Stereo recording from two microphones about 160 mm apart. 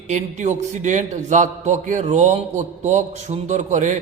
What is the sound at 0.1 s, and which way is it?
A man's voice, 50° right (ahead or behind).